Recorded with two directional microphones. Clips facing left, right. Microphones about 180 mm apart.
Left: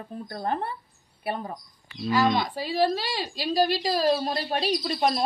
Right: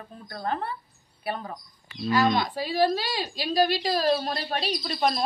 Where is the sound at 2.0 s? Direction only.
5° left (ahead or behind).